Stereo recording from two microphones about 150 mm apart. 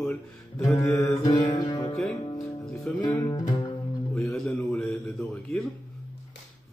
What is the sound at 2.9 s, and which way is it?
Speech, 10° left (ahead or behind).